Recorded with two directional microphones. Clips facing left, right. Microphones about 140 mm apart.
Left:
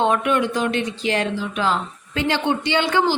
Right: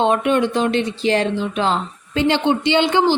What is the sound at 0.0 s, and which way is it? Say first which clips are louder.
Speech: right 3 dB; 25° right (ahead or behind).